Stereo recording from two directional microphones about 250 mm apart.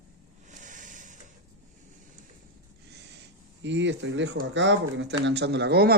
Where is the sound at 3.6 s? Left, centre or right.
Right.